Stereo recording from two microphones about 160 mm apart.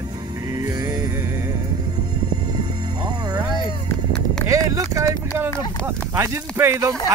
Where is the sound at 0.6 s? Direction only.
20° right (ahead or behind).